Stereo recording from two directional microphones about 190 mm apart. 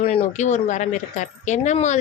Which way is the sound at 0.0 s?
35° left (ahead or behind).